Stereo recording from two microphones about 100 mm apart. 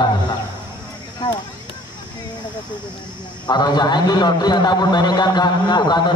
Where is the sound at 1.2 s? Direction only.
45° left (ahead or behind).